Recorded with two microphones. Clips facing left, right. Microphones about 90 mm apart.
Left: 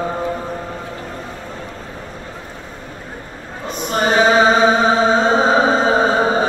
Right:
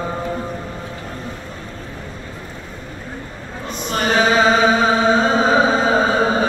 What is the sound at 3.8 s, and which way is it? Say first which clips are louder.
Chant: left 3 dB; 25° left (ahead or behind).